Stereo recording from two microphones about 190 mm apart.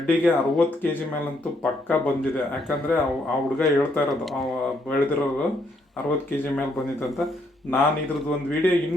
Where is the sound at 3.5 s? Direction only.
Centre (ahead or behind).